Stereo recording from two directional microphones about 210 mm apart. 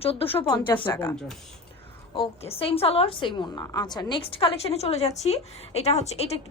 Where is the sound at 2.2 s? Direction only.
25° left (ahead or behind).